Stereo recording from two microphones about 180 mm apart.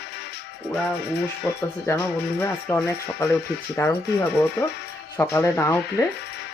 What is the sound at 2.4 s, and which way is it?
Speech, 15° left (ahead or behind).